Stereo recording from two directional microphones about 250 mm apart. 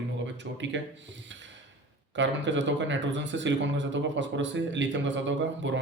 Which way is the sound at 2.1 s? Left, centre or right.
Right.